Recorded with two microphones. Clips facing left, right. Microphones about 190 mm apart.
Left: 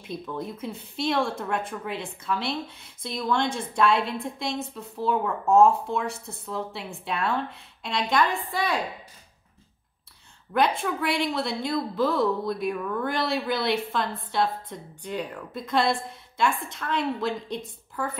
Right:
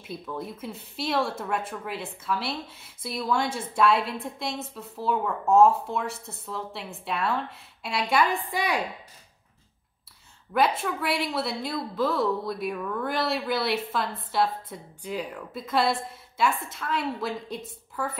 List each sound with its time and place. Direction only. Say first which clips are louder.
0.0 s speech: left 2 dB; 5° right (ahead or behind)
10.5 s speech: even; 5° right (ahead or behind)